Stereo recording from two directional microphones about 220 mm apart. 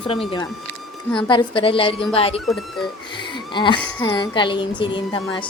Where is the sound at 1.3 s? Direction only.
20° left (ahead or behind).